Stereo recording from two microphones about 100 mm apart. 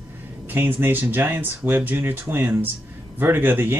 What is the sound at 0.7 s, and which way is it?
Speech, 20° right (ahead or behind).